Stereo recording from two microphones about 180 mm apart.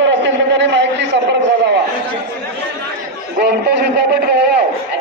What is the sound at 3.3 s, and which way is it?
Speech, 70° right (ahead or behind).